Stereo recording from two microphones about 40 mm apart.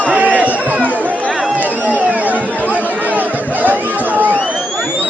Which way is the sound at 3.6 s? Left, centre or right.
Right.